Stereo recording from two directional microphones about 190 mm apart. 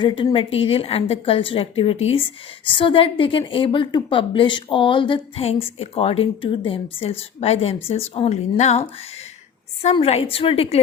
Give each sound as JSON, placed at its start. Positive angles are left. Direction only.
{"t": 0.0, "sound": "a woman's voice", "side_deg": 25}
{"t": 9.8, "sound": "a woman's voice", "side_deg": 30}